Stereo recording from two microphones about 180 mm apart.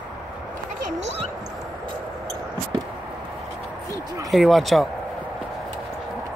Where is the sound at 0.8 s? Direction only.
40° right (ahead or behind).